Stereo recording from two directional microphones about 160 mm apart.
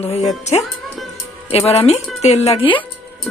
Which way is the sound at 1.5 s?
40° left (ahead or behind).